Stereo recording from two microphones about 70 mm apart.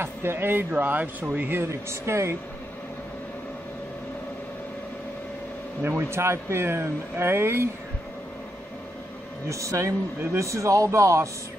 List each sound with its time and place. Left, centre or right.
0.0 s speech: right
1.6 s speech: right
5.9 s speech: right
9.5 s a man's voice: right